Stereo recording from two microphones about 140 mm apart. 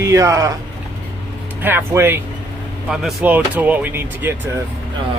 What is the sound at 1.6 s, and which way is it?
Speech, 15° right (ahead or behind).